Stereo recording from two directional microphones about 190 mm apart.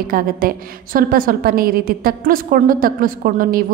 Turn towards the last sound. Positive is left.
turn(degrees=-50)  # may be behind; listen again after turning